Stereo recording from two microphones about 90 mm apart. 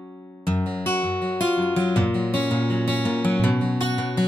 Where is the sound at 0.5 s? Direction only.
15° left (ahead or behind).